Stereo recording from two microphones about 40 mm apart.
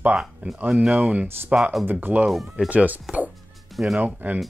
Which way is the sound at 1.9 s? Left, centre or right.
Right.